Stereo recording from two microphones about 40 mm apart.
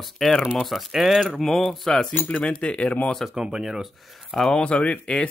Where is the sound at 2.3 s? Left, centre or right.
Left.